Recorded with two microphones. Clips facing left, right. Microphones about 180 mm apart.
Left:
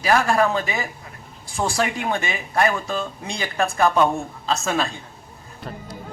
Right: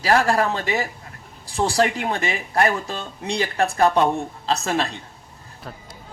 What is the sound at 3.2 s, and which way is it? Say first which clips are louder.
Speech: right 5 dB; 35° right (ahead or behind).